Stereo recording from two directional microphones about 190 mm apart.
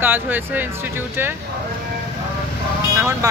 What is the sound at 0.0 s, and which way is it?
Speech, 10° right (ahead or behind).